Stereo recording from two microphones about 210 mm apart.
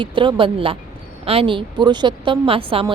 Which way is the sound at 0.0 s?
25° right (ahead or behind).